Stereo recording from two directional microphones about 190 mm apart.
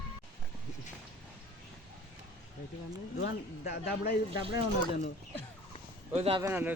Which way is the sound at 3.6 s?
55° left (ahead or behind).